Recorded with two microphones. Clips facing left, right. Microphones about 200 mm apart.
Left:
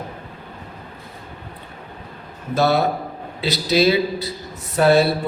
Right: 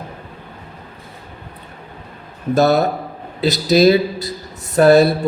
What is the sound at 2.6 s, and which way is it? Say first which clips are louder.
A man's voice: right 3 dB; 40° right (ahead or behind).